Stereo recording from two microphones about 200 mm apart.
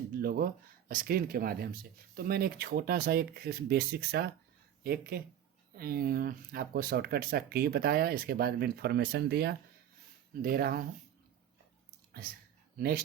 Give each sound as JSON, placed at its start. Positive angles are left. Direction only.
{"t": 0.2, "sound": "speech", "side_deg": -50}